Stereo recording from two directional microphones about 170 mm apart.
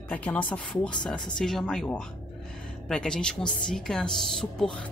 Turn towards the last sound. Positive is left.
turn(degrees=5)  # may be behind; listen again after turning